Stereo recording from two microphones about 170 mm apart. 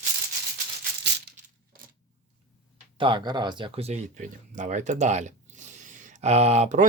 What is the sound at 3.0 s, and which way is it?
Speech, 30° right (ahead or behind).